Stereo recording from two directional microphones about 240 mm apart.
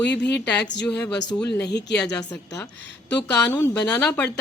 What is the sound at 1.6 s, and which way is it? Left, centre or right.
Speech, left.